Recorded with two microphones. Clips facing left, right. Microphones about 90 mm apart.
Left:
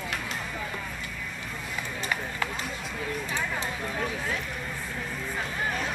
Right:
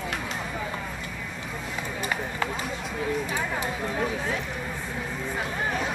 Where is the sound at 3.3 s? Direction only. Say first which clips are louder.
Right 2 dB; 15° right (ahead or behind).